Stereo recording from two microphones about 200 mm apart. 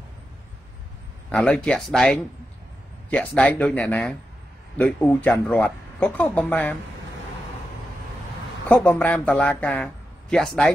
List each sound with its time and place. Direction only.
1.3 s speech: 5° left (ahead or behind)
8.6 s speech: 5° left (ahead or behind)